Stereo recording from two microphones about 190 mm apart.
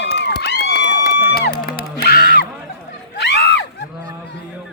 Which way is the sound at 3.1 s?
65° left (ahead or behind).